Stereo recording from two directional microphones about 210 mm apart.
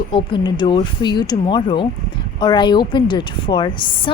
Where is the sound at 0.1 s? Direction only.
25° left (ahead or behind).